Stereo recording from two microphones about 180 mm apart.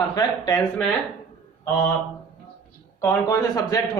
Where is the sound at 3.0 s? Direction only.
20° left (ahead or behind).